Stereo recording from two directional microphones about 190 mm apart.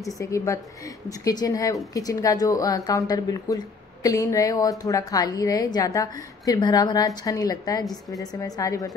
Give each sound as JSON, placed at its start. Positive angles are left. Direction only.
{"t": 0.2, "sound": "a woman's voice", "side_deg": 15}